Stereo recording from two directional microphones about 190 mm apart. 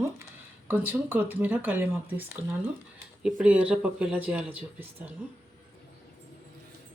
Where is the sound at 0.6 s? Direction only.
10° right (ahead or behind).